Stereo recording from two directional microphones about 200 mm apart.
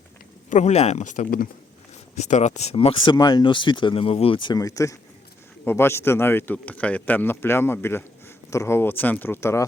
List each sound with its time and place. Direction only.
0.5 s a man's voice: 35° left (ahead or behind); by 9.6 s 15° left (ahead or behind)